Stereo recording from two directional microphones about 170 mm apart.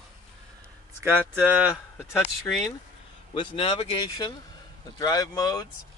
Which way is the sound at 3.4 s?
30° left (ahead or behind).